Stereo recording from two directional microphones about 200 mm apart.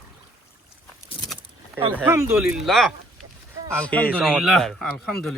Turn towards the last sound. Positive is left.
turn(degrees=0)  # may be behind; listen again after turning